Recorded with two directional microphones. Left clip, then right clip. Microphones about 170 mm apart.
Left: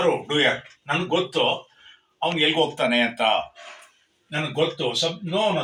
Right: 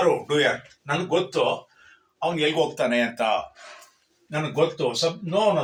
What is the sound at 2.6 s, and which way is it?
Speech, 35° right (ahead or behind).